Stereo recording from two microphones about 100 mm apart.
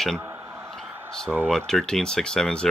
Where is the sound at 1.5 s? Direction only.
5° left (ahead or behind).